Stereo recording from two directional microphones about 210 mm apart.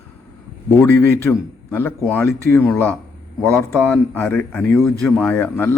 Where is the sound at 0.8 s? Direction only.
10° left (ahead or behind).